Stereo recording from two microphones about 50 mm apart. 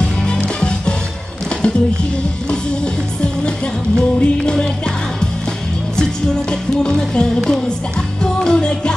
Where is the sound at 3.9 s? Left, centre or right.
Centre.